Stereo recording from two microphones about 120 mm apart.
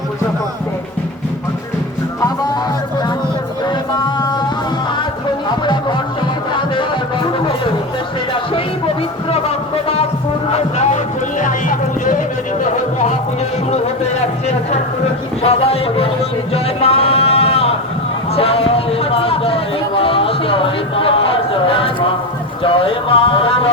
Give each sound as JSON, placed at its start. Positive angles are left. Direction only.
{"t": 4.0, "sound": "music", "side_deg": 35}
{"t": 5.6, "sound": "music", "side_deg": 40}
{"t": 9.3, "sound": "music", "side_deg": 55}
{"t": 10.5, "sound": "music", "side_deg": 70}
{"t": 13.7, "sound": "a sound", "side_deg": 60}
{"t": 15.4, "sound": "speech", "side_deg": 55}
{"t": 16.6, "sound": "sheep", "side_deg": 55}
{"t": 18.3, "sound": "music", "side_deg": 55}
{"t": 22.6, "sound": "a sound", "side_deg": 50}